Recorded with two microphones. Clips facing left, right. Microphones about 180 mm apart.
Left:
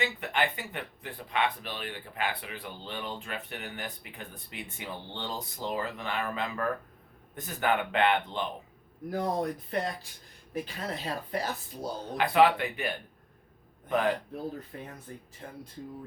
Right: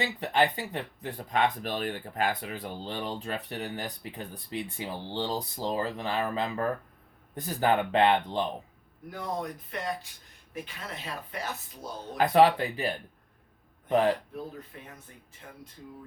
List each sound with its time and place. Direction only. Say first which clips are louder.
0.0 s speech: right 4 dB; 35° right (ahead or behind)
9.0 s speech: left 4 dB; 40° left (ahead or behind)
12.1 s speech: right 2 dB; 40° right (ahead or behind)
13.9 s speech: right 3 dB; 30° right (ahead or behind)
14.7 s speech: left 5 dB; 40° left (ahead or behind)